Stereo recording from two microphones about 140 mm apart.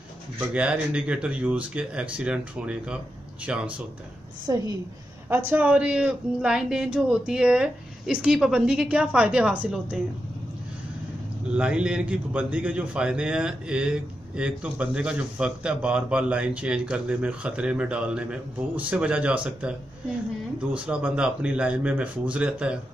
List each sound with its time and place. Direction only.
0.5 s a man's voice: 10° right (ahead or behind)
4.5 s a woman's voice: 25° right (ahead or behind)
5.3 s a man's voice: 15° right (ahead or behind)
11.5 s a man's voice: 10° right (ahead or behind)
20.7 s a man's voice: 10° right (ahead or behind)